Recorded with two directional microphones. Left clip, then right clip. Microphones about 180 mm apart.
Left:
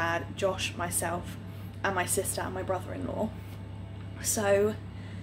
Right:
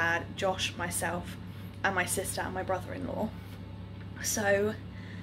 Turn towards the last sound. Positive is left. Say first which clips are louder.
# left 2 dB
turn(degrees=10)  # may be behind; listen again after turning